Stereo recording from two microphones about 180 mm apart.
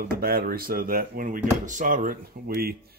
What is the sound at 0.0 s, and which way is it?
Speech, 55° right (ahead or behind).